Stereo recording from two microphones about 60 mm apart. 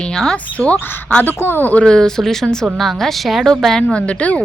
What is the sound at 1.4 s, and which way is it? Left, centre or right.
Speech, left.